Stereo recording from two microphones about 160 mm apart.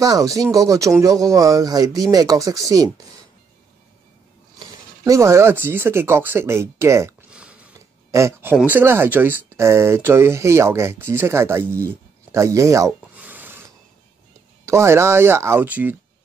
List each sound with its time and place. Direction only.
0.0 s speech: 20° right (ahead or behind)
5.0 s speech: 20° right (ahead or behind)
7.2 s a sound: 5° right (ahead or behind)
8.1 s speech: 15° right (ahead or behind)
13.1 s a sound: 10° right (ahead or behind)
14.7 s speech: 15° right (ahead or behind)